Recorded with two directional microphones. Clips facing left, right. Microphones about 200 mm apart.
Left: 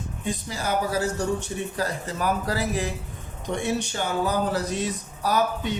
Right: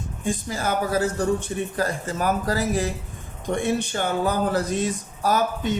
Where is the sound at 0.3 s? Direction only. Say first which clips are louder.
Right 3 dB; 50° right (ahead or behind).